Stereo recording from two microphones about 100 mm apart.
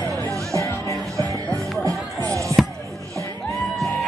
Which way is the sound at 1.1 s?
30° right (ahead or behind).